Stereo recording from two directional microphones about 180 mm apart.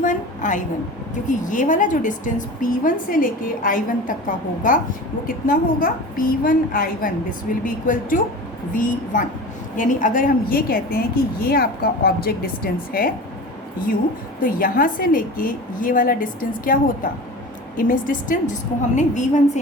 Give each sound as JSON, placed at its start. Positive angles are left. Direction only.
{"t": 0.0, "sound": "a sound", "side_deg": 45}
{"t": 1.3, "sound": "a woman's voice", "side_deg": 45}
{"t": 14.4, "sound": "a woman's voice", "side_deg": 50}